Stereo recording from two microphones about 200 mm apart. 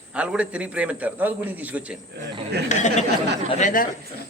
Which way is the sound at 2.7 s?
35° left (ahead or behind).